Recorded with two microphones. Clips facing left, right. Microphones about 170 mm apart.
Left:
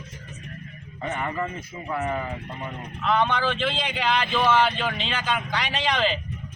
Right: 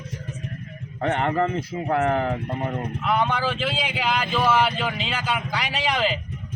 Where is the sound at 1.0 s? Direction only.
70° right (ahead or behind).